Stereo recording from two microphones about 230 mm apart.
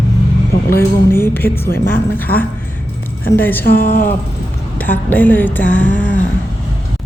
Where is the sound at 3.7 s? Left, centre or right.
Left.